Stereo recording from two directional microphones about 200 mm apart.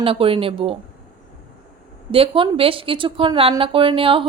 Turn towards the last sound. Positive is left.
turn(degrees=-25)  # may be behind; listen again after turning